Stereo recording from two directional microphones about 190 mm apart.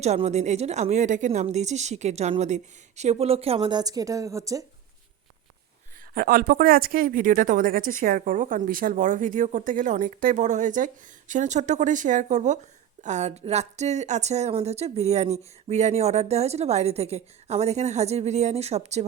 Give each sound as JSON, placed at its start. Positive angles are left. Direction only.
{"t": 0.0, "sound": "speech", "side_deg": -35}
{"t": 6.1, "sound": "speech", "side_deg": -50}